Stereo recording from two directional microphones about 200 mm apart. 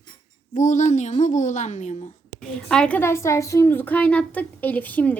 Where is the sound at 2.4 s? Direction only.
5° left (ahead or behind).